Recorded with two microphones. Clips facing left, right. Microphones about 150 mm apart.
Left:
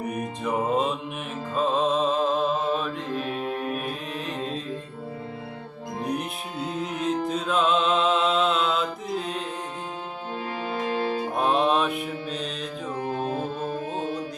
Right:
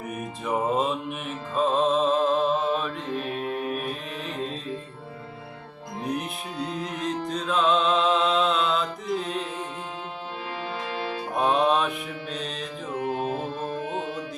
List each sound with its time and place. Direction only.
0.0 s music: 5° right (ahead or behind)
1.5 s mantra: centre (ahead or behind)
4.3 s music: centre (ahead or behind)
6.0 s music: centre (ahead or behind)
10.8 s music: 45° left (ahead or behind)
11.3 s music: centre (ahead or behind)